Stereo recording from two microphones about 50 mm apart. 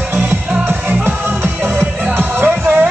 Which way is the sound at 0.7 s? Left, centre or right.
Right.